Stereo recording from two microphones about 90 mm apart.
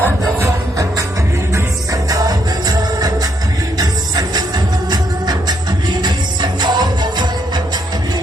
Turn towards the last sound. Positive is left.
turn(degrees=-55)  # may be behind; listen again after turning